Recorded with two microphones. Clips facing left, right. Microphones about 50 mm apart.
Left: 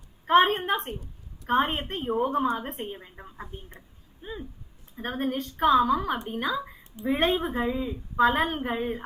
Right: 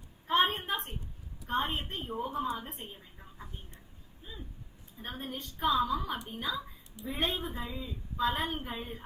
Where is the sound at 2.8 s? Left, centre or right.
Left.